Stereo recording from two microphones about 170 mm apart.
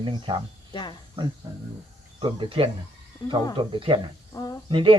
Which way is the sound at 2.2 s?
30° right (ahead or behind).